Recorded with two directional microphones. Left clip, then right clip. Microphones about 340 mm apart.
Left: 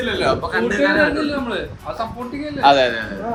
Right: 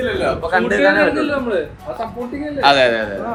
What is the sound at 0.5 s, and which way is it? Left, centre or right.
Speech, centre.